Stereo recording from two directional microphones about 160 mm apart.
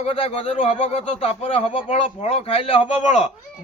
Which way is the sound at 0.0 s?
35° left (ahead or behind).